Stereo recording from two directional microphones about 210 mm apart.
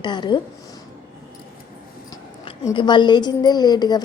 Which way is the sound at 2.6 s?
20° left (ahead or behind).